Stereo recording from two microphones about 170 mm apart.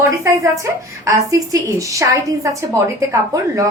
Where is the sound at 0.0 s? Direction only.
20° right (ahead or behind).